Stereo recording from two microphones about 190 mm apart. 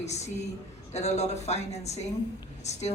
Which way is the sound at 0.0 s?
35° left (ahead or behind).